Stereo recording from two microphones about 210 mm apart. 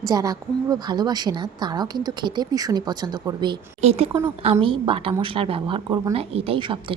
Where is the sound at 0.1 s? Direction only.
15° right (ahead or behind).